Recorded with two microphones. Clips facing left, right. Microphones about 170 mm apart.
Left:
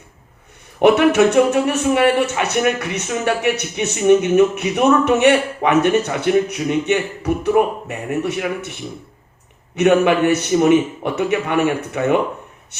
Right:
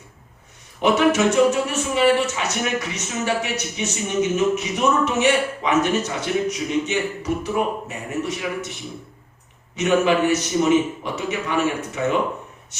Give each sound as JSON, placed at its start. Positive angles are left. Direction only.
{"t": 0.8, "sound": "a man's voice", "side_deg": 60}
{"t": 9.7, "sound": "a man's voice", "side_deg": 60}